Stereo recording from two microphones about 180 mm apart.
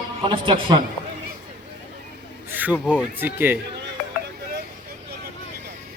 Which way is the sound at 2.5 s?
10° right (ahead or behind).